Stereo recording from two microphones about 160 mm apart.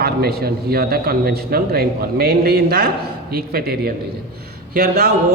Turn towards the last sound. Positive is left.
turn(degrees=-75)  # may be behind; listen again after turning